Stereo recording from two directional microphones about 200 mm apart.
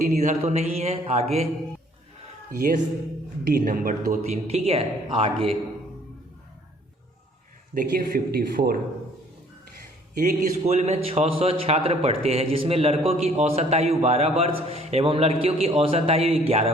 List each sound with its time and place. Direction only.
0.0 s speech: 45° right (ahead or behind)
2.5 s speech: 40° right (ahead or behind)
4.4 s a man's voice: 30° right (ahead or behind)
7.7 s speech: 45° right (ahead or behind)
10.2 s a man's voice: 40° right (ahead or behind)